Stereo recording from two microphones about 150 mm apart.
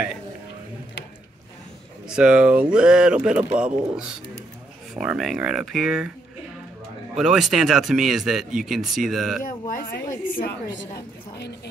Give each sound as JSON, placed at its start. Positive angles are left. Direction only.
{"t": 2.0, "sound": "speech", "side_deg": -5}
{"t": 7.2, "sound": "speech", "side_deg": 0}
{"t": 9.4, "sound": "a woman's voice", "side_deg": 65}